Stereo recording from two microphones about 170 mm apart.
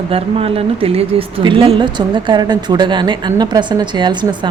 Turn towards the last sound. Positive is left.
turn(degrees=-25)  # may be behind; listen again after turning